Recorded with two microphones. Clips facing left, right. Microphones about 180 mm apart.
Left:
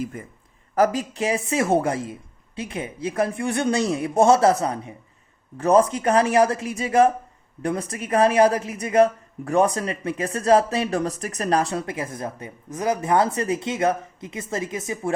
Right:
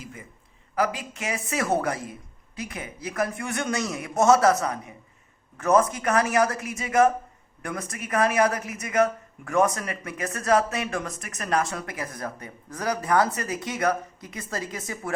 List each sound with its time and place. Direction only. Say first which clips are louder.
0.0 s a man's voice: left 11 dB; 50° left (ahead or behind)
0.8 s a woman's voice: left 7 dB; 40° left (ahead or behind); by 15.1 s 20° left (ahead or behind)